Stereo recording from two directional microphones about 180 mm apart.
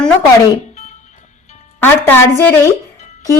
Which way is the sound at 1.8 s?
10° left (ahead or behind).